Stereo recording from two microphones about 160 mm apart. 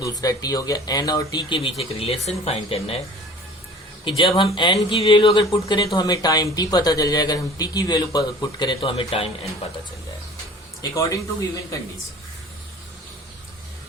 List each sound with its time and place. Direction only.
0.0 s speech: 25° left (ahead or behind); by 3.0 s 40° left (ahead or behind)
4.2 s speech: 35° left (ahead or behind)
10.9 s speech: 20° left (ahead or behind)